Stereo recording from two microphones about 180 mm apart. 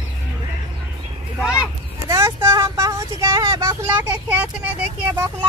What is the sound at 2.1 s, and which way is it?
Vehicle, 15° right (ahead or behind).